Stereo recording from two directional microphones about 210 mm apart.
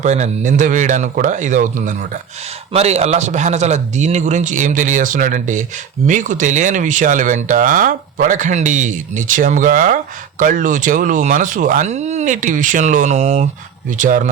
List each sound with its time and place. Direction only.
0.0 s speech: 35° right (ahead or behind)